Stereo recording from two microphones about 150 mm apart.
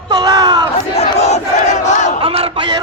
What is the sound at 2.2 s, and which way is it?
Speech, 40° right (ahead or behind).